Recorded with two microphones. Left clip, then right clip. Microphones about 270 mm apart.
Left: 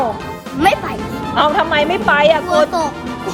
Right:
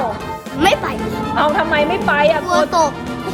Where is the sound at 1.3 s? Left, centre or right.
Left.